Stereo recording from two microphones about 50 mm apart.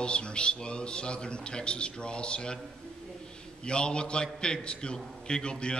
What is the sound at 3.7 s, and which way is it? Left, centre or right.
A man's voice, centre.